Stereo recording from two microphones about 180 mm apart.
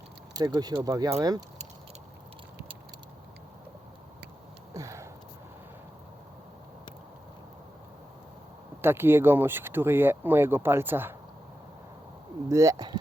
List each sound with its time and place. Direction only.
0.3 s speech: 20° right (ahead or behind)
4.7 s sniff: 15° right (ahead or behind)
8.8 s speech: 10° right (ahead or behind)
12.5 s speech: 15° right (ahead or behind)